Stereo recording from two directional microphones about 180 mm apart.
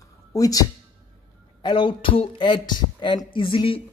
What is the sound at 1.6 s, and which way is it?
Speech, 25° left (ahead or behind).